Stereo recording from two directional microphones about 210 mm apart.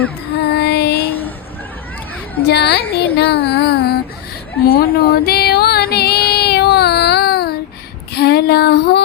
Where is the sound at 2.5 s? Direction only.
50° left (ahead or behind).